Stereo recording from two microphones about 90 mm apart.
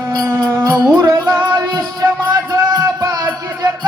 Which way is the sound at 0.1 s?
45° right (ahead or behind).